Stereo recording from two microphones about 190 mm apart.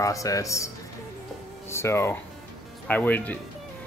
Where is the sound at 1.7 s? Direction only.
15° left (ahead or behind).